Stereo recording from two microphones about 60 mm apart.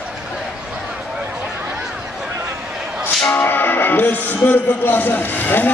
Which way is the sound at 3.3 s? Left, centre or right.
Left.